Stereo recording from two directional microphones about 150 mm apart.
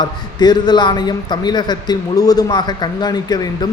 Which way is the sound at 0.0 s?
30° left (ahead or behind).